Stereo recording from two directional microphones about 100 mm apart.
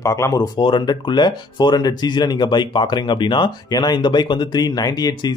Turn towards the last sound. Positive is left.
turn(degrees=45)  # may be behind; listen again after turning